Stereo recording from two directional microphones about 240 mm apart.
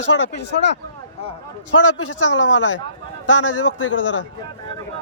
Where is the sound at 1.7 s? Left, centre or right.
Left.